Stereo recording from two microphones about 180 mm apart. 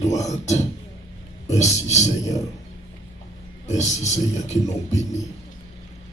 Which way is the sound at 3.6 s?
40° left (ahead or behind).